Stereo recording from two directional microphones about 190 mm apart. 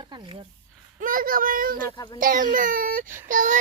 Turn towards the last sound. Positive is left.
turn(degrees=-40)  # may be behind; listen again after turning